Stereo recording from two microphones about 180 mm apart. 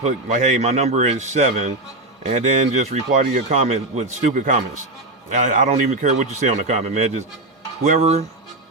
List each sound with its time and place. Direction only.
0.0 s a man's voice: 40° right (ahead or behind)